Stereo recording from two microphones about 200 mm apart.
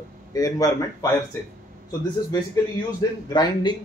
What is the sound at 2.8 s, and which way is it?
Speech, 20° left (ahead or behind).